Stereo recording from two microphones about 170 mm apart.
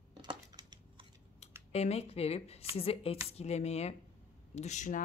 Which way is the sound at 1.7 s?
40° left (ahead or behind).